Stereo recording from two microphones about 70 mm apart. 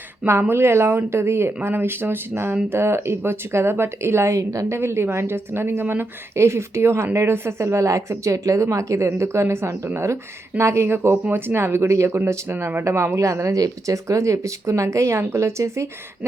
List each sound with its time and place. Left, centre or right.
0.3 s speech: right